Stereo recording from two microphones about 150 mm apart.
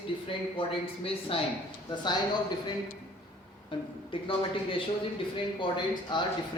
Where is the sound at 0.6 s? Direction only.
35° left (ahead or behind).